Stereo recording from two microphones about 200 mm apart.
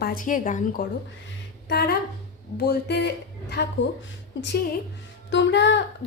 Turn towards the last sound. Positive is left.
turn(degrees=60)  # may be behind; listen again after turning